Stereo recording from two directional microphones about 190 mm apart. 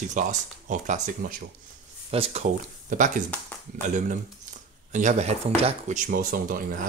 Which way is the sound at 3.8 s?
40° right (ahead or behind).